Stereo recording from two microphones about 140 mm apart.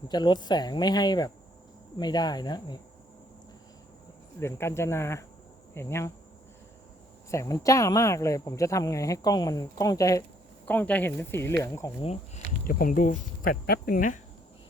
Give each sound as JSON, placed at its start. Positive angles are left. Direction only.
{"t": 0.1, "sound": "speech", "side_deg": 30}
{"t": 4.4, "sound": "speech", "side_deg": 20}
{"t": 7.3, "sound": "speech", "side_deg": 20}
{"t": 10.7, "sound": "speech", "side_deg": 10}
{"t": 11.9, "sound": "speech", "side_deg": 50}
{"t": 12.6, "sound": "speech", "side_deg": 85}